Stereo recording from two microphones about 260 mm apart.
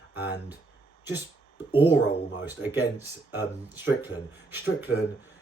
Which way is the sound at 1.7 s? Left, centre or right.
Centre.